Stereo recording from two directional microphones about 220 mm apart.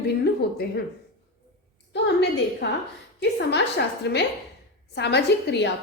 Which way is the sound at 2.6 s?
50° left (ahead or behind).